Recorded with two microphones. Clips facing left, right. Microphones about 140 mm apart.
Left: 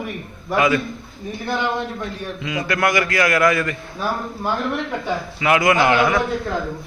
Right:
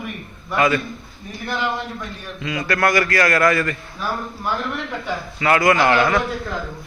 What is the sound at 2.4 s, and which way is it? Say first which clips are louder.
A man's voice: right 1 dB; 15° left (ahead or behind).